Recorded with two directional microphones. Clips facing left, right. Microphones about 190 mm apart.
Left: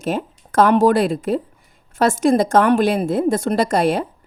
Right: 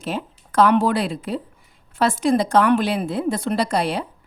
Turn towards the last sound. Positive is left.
turn(degrees=50)  # may be behind; listen again after turning